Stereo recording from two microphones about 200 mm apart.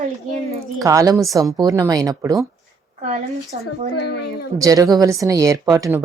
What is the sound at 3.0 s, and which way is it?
Speech, 35° right (ahead or behind).